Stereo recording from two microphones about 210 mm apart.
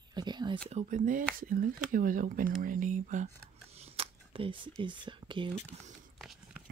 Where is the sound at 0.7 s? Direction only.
35° right (ahead or behind).